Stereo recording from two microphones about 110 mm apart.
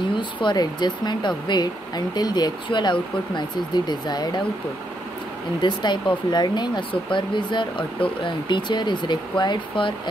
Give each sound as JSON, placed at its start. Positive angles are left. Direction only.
{"t": 0.1, "sound": "speech", "side_deg": 45}
{"t": 5.6, "sound": "speech", "side_deg": 40}